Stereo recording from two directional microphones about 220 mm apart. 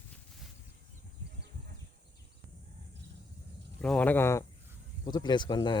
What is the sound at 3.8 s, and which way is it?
Speech, 5° left (ahead or behind).